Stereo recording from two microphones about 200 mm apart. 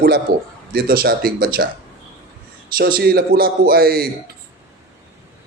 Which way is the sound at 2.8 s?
50° right (ahead or behind).